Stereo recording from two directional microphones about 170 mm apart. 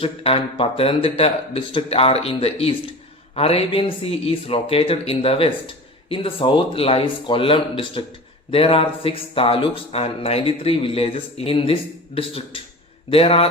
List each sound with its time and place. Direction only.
0.0 s speech: 35° left (ahead or behind)